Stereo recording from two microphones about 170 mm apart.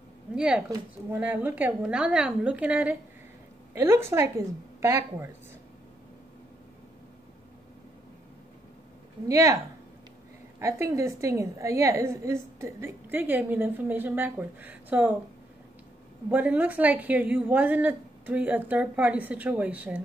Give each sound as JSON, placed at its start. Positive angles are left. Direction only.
{"t": 1.1, "sound": "a woman's voice", "side_deg": -10}
{"t": 9.3, "sound": "a woman's voice", "side_deg": -20}
{"t": 10.6, "sound": "a woman's voice", "side_deg": -15}
{"t": 16.3, "sound": "a woman's voice", "side_deg": -10}